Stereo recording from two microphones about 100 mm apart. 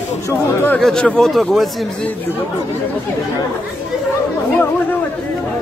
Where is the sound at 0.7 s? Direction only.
5° left (ahead or behind).